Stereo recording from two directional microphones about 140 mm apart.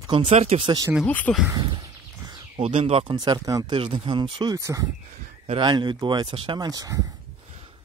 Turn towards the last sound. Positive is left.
turn(degrees=-25)  # may be behind; listen again after turning